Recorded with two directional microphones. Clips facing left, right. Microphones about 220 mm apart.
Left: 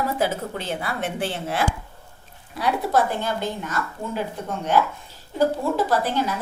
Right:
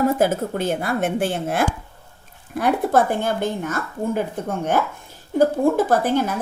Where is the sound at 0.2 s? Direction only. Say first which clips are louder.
Right 5 dB; 50° right (ahead or behind).